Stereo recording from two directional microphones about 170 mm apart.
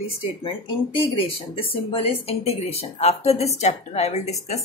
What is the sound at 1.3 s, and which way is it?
A woman's voice, 35° left (ahead or behind).